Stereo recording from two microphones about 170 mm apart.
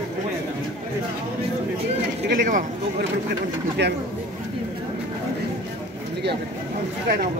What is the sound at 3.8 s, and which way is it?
Speech, 80° right.